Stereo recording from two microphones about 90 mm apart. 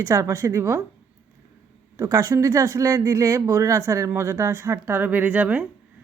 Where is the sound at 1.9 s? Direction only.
30° right (ahead or behind); by 5.7 s 15° right (ahead or behind).